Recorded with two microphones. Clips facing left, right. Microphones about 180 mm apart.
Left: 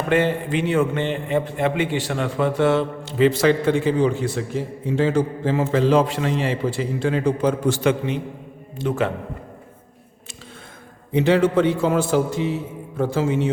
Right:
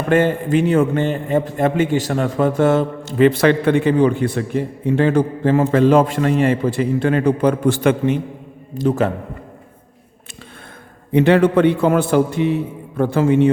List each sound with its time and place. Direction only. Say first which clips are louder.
0.1 s a man's voice: right 5 dB; 45° right (ahead or behind)
8.7 s a man's voice: right 5 dB; 40° right (ahead or behind)
11.1 s a man's voice: right 4 dB; 60° right (ahead or behind)